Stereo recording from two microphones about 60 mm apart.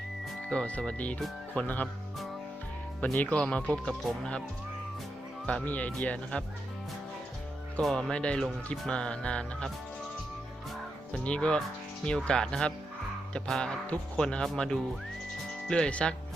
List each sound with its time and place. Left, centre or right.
0.5 s speech: centre
3.0 s speech: left
5.6 s speech: left
7.8 s speech: centre
8.1 s speech: centre
11.2 s speech: centre